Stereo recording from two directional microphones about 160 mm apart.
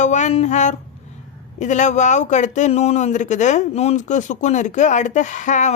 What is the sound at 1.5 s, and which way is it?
Speech, 50° left (ahead or behind).